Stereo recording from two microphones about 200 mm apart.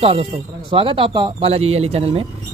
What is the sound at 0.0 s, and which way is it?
Speech, 30° right (ahead or behind).